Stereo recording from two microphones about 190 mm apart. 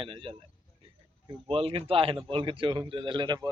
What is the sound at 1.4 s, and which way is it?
A man's voice, 30° right (ahead or behind).